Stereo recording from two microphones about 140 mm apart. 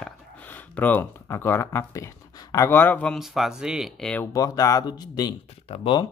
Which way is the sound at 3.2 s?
Centre (ahead or behind).